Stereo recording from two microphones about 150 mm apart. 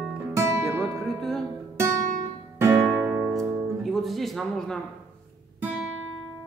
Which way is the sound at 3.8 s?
Centre (ahead or behind).